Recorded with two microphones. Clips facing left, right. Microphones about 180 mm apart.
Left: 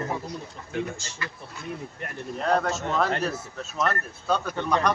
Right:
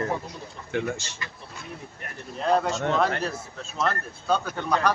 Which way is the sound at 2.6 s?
5° left (ahead or behind).